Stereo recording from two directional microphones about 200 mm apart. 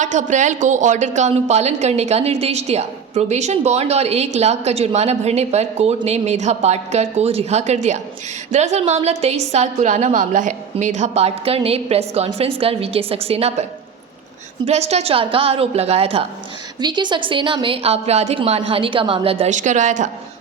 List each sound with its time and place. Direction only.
0.0 s a woman's voice: 40° right (ahead or behind)